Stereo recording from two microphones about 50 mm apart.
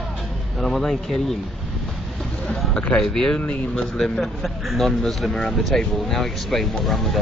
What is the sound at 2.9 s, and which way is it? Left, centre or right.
A man's voice, centre.